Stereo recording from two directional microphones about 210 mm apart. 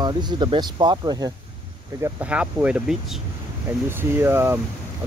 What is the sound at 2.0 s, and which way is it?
Speech, 5° right (ahead or behind).